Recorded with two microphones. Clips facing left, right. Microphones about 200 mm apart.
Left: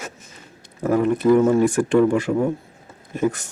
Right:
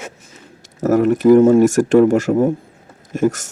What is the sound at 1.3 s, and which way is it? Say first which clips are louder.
Speech: right 6 dB; 35° right (ahead or behind).